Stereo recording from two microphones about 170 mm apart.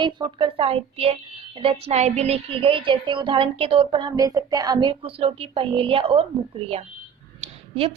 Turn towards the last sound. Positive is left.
turn(degrees=-35)  # may be behind; listen again after turning